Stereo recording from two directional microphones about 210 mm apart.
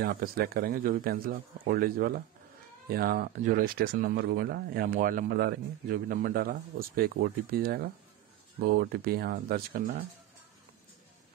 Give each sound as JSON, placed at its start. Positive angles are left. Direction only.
{"t": 0.0, "sound": "speech", "side_deg": -45}